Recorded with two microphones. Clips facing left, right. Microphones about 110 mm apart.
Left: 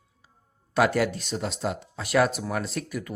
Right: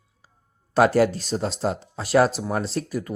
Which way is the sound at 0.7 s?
35° right (ahead or behind).